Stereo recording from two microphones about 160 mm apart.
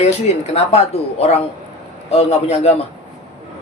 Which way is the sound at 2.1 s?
40° left (ahead or behind).